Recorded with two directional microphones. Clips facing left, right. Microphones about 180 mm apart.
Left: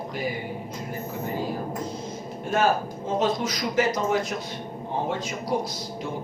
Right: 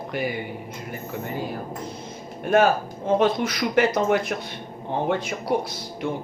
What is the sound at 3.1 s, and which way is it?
Speech, 60° right (ahead or behind).